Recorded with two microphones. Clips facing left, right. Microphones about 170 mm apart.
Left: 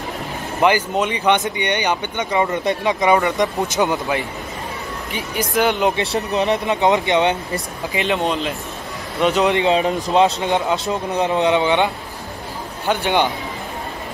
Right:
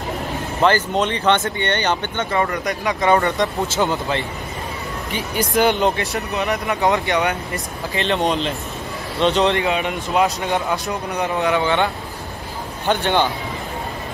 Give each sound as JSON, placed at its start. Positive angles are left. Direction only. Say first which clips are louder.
{"t": 0.6, "sound": "speech", "louder": "left 1 dB", "side_deg": 10}
{"t": 3.1, "sound": "speech", "louder": "even", "side_deg": 10}
{"t": 5.1, "sound": "speech", "louder": "right 1 dB", "side_deg": 0}
{"t": 5.9, "sound": "a man's voice", "louder": "left 3 dB", "side_deg": 30}
{"t": 8.1, "sound": "speech", "louder": "right 2 dB", "side_deg": 0}
{"t": 9.6, "sound": "a man's voice", "louder": "left 4 dB", "side_deg": 30}
{"t": 10.5, "sound": "speech", "louder": "left 2 dB", "side_deg": 20}